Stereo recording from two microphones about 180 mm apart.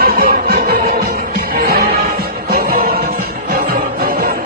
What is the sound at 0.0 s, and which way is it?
Music, 55° right (ahead or behind).